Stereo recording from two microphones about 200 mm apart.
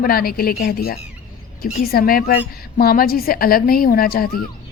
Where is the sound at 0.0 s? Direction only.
50° left (ahead or behind).